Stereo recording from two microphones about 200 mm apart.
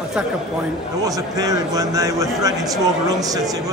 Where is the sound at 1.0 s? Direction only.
15° right (ahead or behind).